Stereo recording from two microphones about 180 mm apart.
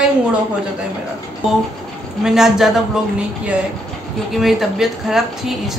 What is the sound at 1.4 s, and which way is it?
A man's voice, centre (ahead or behind).